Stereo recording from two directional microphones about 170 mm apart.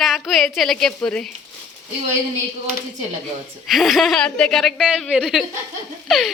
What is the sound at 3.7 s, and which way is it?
A woman's voice, centre (ahead or behind).